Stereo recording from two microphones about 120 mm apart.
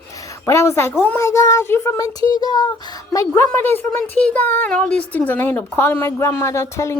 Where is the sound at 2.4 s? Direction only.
35° left (ahead or behind).